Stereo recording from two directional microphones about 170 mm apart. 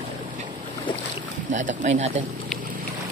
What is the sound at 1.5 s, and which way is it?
Speech, 45° right (ahead or behind).